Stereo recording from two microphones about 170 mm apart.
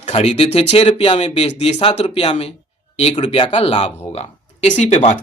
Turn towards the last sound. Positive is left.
turn(degrees=40)  # may be behind; listen again after turning